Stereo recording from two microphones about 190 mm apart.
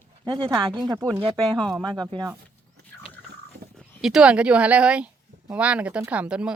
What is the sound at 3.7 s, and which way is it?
A woman's voice, centre (ahead or behind).